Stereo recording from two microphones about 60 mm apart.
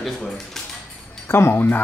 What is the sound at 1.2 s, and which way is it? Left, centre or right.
Speech, left.